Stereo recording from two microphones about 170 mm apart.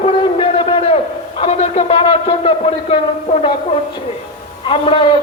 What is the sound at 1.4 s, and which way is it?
Speech, 35° left (ahead or behind).